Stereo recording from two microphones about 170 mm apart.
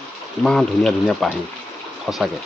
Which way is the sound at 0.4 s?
Centre (ahead or behind).